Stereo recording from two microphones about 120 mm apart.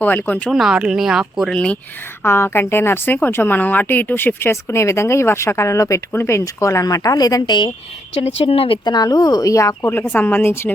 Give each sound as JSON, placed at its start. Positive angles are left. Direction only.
{"t": 0.0, "sound": "speech", "side_deg": 15}
{"t": 0.5, "sound": "speech", "side_deg": -5}
{"t": 1.5, "sound": "speech", "side_deg": 10}
{"t": 2.2, "sound": "a woman's voice", "side_deg": 20}
{"t": 8.1, "sound": "speech", "side_deg": 60}